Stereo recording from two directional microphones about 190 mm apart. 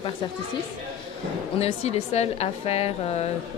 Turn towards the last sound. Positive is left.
turn(degrees=35)  # may be behind; listen again after turning